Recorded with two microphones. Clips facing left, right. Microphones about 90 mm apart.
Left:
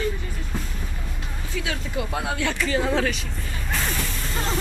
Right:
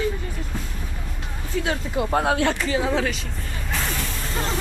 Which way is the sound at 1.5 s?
30° right (ahead or behind).